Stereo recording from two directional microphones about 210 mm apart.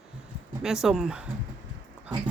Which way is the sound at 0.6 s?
5° right (ahead or behind).